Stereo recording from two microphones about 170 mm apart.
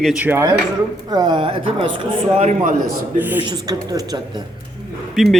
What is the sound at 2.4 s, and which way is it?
Speech, 45° right (ahead or behind).